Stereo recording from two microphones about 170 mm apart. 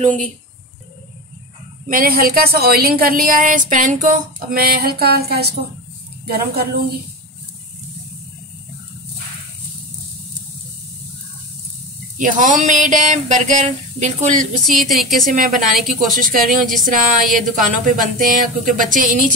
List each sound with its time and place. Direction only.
1.9 s a woman's voice: 60° right (ahead or behind)
12.2 s speech: 50° right (ahead or behind)
14.7 s a woman's voice: centre (ahead or behind)
15.3 s speech: 55° right (ahead or behind)